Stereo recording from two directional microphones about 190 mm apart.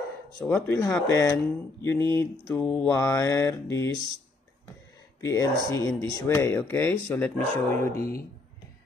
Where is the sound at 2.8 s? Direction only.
15° left (ahead or behind).